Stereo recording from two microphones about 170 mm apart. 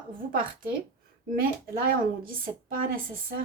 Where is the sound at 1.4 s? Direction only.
60° right (ahead or behind).